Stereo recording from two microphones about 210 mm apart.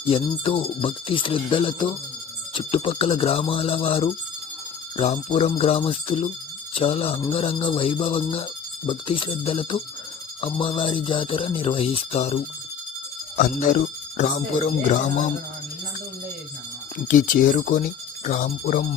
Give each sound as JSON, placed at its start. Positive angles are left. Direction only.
{"t": 0.1, "sound": "speech", "side_deg": 25}
{"t": 13.3, "sound": "jingle bell", "side_deg": 40}
{"t": 17.1, "sound": "jingle bell", "side_deg": 40}